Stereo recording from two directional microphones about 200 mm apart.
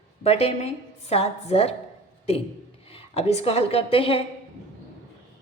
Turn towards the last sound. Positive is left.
turn(degrees=25)  # may be behind; listen again after turning